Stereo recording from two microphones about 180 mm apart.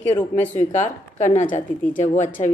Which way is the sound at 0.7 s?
45° left (ahead or behind).